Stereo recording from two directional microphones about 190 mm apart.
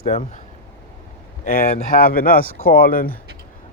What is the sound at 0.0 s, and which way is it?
Speech, 40° left (ahead or behind).